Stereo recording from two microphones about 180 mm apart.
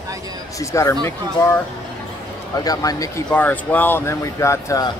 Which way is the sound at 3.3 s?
10° left (ahead or behind).